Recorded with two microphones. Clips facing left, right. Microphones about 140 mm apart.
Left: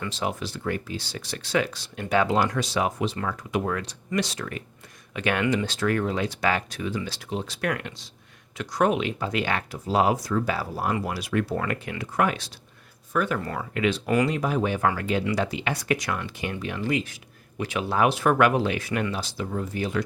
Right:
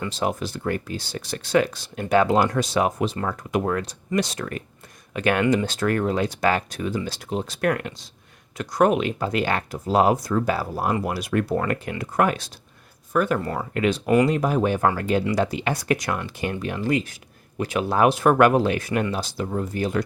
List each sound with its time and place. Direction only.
0.1 s speech: 45° right (ahead or behind)
11.0 s speech: 50° right (ahead or behind)
11.5 s speech: 35° right (ahead or behind)